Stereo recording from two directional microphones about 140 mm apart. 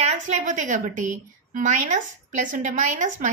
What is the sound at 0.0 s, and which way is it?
A woman's voice, 60° right (ahead or behind).